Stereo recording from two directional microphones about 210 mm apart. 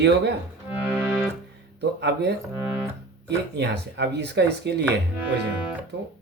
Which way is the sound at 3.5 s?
55° right (ahead or behind).